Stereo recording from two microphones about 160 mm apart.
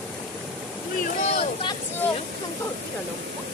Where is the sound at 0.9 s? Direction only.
45° left (ahead or behind).